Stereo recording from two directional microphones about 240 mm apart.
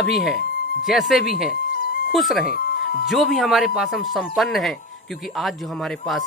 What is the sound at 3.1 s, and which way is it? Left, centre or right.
Speech, centre.